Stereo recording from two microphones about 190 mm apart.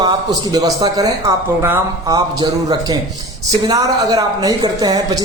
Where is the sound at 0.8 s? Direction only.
20° right (ahead or behind).